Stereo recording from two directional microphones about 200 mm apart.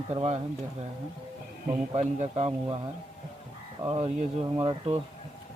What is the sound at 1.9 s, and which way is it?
Speech, 30° right (ahead or behind).